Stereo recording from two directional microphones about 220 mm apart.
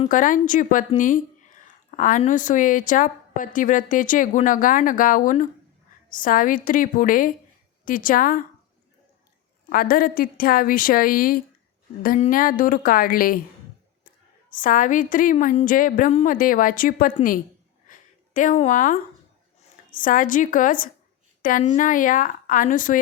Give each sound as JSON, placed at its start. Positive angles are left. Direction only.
{"t": 0.1, "sound": "a woman's voice", "side_deg": 35}
{"t": 9.6, "sound": "a woman's voice", "side_deg": 40}
{"t": 14.5, "sound": "a woman's voice", "side_deg": 40}
{"t": 17.8, "sound": "a sound", "side_deg": 35}
{"t": 19.9, "sound": "a woman's voice", "side_deg": 40}